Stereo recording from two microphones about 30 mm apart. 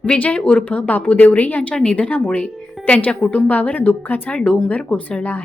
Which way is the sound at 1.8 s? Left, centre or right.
Left.